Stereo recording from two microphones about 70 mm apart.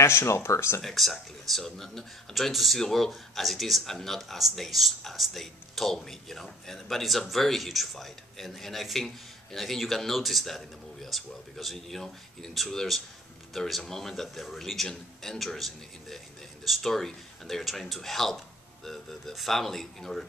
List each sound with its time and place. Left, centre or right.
0.0 s speech: left
0.8 s speech: centre